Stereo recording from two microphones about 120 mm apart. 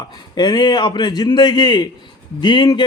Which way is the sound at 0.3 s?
40° left (ahead or behind).